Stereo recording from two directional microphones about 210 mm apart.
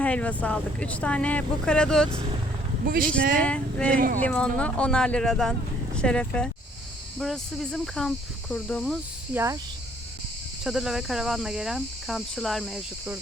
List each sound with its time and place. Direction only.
0.0 s speech: 5° left (ahead or behind)
2.8 s speech: 40° right (ahead or behind)
3.4 s speech: 5° left (ahead or behind)
3.8 s speech: 40° right (ahead or behind)
4.2 s speech: 5° left (ahead or behind)
10.6 s speech: centre (ahead or behind)